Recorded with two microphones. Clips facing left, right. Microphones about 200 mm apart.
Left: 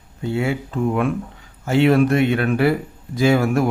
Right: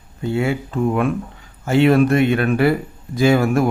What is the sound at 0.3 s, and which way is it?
Speech, 50° right (ahead or behind).